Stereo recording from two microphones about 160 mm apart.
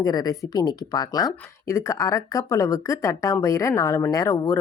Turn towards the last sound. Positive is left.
turn(degrees=20)  # may be behind; listen again after turning